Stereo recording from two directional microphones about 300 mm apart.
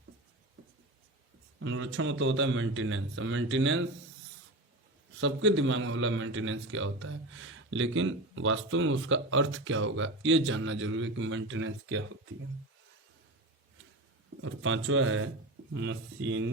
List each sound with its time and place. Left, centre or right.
1.5 s a man's voice: right
5.2 s a man's voice: right
14.4 s a man's voice: right